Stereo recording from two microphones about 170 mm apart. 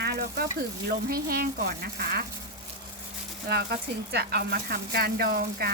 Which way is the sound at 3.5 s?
70° right (ahead or behind).